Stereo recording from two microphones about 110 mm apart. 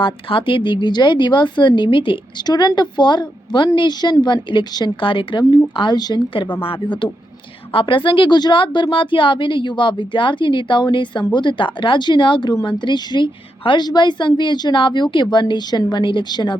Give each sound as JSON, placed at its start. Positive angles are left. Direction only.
{"t": 0.0, "sound": "a woman's voice", "side_deg": 50}